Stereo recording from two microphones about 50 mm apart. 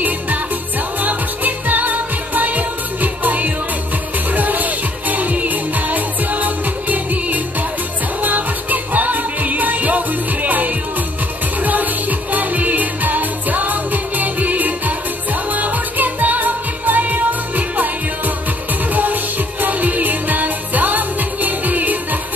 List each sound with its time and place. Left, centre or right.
1.0 s music of asia: right
4.3 s music: right
19.6 s music: right